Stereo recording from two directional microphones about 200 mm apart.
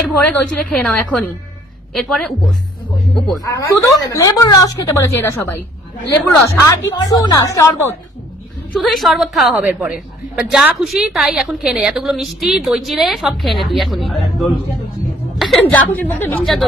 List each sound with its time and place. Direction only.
0.0 s a woman's voice: 5° left (ahead or behind)
3.3 s a woman's voice: 15° left (ahead or behind)
6.0 s a woman's voice: 15° left (ahead or behind)
8.7 s a woman's voice: centre (ahead or behind)
15.3 s music: centre (ahead or behind)
15.9 s a woman's voice: 10° left (ahead or behind)